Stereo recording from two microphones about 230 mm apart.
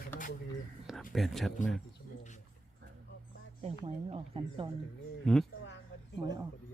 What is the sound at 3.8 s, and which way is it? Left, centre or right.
Speech, right.